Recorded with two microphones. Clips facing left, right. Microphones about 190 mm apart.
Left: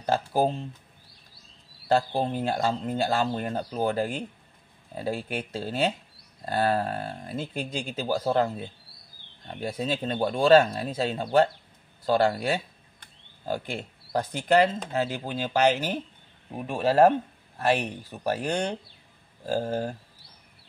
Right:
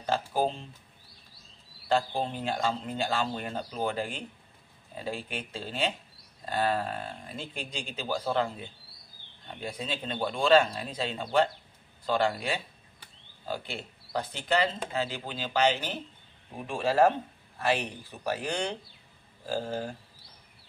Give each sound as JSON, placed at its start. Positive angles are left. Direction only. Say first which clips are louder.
{"t": 0.0, "sound": "speech", "louder": "left 4 dB", "side_deg": 45}
{"t": 1.9, "sound": "speech", "louder": "left 4 dB", "side_deg": 45}
{"t": 9.5, "sound": "speech", "louder": "left 6 dB", "side_deg": 40}
{"t": 18.2, "sound": "speech", "louder": "left 4 dB", "side_deg": 50}